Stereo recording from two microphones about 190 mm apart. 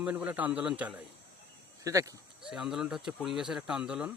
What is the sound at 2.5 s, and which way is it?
Speech, 5° right (ahead or behind).